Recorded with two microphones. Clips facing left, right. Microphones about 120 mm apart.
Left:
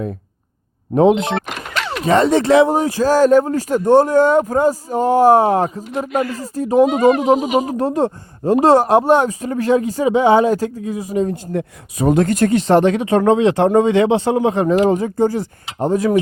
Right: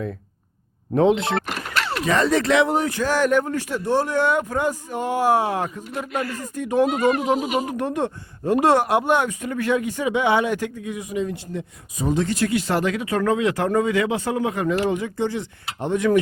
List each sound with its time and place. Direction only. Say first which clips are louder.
0.9 s speech: left 5 dB; 20° left (ahead or behind)
2.0 s speech: left 7 dB; 30° left (ahead or behind)
6.1 s speech: left 7 dB; 10° left (ahead or behind)
6.4 s speech: left 6 dB; 35° left (ahead or behind)
6.7 s speech: left 6 dB; 15° left (ahead or behind)
7.6 s speech: left 6 dB; 35° left (ahead or behind)
11.5 s speech: left 8 dB; 60° left (ahead or behind); by 16.2 s 35° left (ahead or behind)